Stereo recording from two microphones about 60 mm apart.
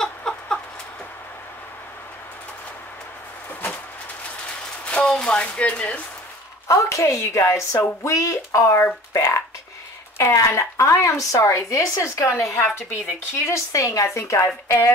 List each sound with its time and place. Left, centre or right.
0.0 s chicken: centre
4.8 s speech: centre
6.7 s a woman's voice: left
8.0 s speech: left
12.3 s a woman's voice: left
13.3 s speech: left